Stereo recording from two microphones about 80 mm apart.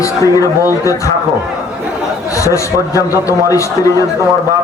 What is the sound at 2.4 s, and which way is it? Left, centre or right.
A man's voice, left.